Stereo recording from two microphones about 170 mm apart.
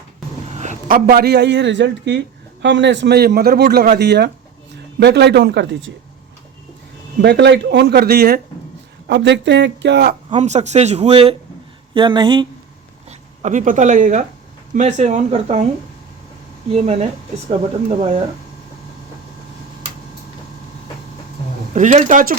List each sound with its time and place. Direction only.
0.5 s speech: 45° right (ahead or behind); by 5.9 s 85° right
7.2 s speech: 85° right; by 8.4 s 65° right (ahead or behind)
9.0 s speech: 90° right
10.3 s speech: 40° right (ahead or behind)
13.1 s speech: 45° right (ahead or behind)
16.7 s speech: 40° right (ahead or behind)
21.7 s speech: 45° right (ahead or behind)